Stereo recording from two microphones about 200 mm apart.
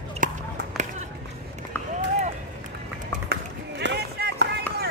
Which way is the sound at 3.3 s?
60° right (ahead or behind).